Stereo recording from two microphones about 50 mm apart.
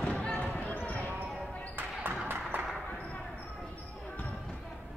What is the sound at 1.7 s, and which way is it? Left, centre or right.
Basketball bounce, right.